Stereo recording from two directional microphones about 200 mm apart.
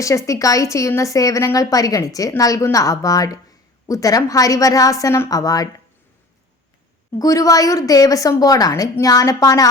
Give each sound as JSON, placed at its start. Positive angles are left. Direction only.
{"t": 0.3, "sound": "a woman's voice", "side_deg": 15}
{"t": 7.2, "sound": "a woman's voice", "side_deg": 15}